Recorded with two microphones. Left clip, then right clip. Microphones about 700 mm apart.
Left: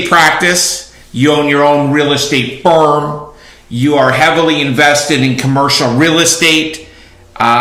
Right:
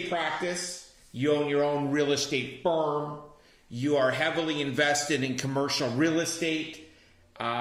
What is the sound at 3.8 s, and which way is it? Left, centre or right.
A man's voice, centre.